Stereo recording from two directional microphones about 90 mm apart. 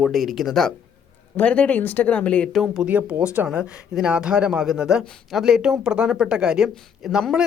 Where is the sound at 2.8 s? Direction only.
15° right (ahead or behind).